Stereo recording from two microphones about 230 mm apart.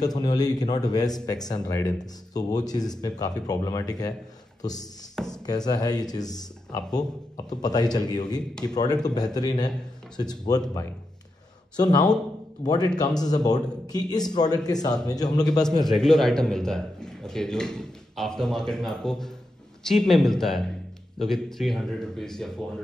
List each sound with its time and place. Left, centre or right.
0.0 s speech: centre
11.7 s speech: centre
15.8 s a man's voice: centre